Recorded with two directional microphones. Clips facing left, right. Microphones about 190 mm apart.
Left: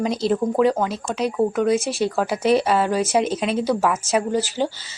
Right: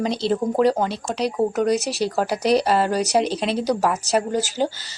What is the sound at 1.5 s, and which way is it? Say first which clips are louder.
Speech: left 1 dB; 40° right (ahead or behind).